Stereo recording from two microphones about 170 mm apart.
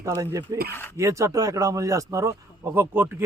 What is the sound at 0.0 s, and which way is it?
Speech, 15° right (ahead or behind).